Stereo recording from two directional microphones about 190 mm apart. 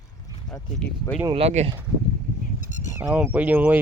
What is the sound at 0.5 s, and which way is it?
Speech, 10° left (ahead or behind).